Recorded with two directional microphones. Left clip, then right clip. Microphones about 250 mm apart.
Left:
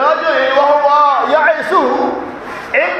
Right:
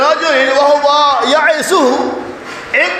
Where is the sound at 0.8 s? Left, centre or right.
Right.